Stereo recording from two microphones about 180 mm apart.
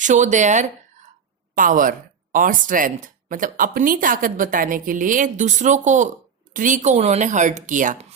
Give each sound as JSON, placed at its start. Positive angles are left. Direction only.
{"t": 0.0, "sound": "speech", "side_deg": -45}